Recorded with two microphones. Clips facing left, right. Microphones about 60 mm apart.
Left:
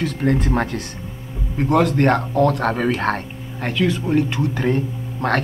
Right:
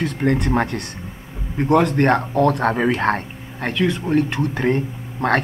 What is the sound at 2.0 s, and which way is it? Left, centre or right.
Speech, right.